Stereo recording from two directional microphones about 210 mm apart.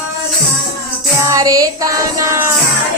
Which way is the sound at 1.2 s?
15° right (ahead or behind).